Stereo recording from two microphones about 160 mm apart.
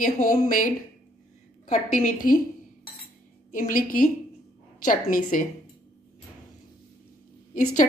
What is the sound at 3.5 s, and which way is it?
A woman's voice, 60° left (ahead or behind).